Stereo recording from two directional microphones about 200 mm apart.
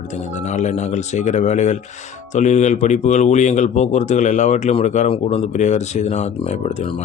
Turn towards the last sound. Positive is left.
turn(degrees=30)  # may be behind; listen again after turning